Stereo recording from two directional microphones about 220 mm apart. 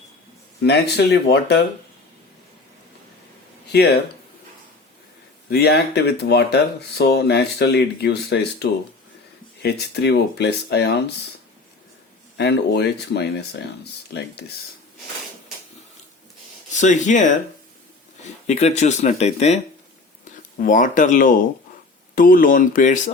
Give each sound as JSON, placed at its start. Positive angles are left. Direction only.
{"t": 0.6, "sound": "speech", "side_deg": 50}
{"t": 5.5, "sound": "speech", "side_deg": 45}
{"t": 12.4, "sound": "speech", "side_deg": 50}
{"t": 16.7, "sound": "speech", "side_deg": 35}
{"t": 20.6, "sound": "speech", "side_deg": 35}